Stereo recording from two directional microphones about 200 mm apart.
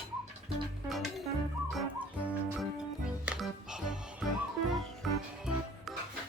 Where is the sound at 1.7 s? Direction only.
5° right (ahead or behind).